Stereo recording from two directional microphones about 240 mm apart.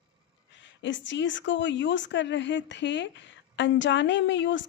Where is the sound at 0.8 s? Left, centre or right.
Left.